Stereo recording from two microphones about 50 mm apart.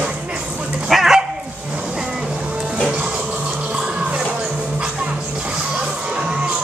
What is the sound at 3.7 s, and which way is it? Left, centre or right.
Music, centre.